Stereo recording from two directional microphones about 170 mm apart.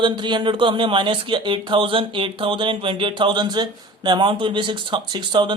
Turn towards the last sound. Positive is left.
turn(degrees=-25)  # may be behind; listen again after turning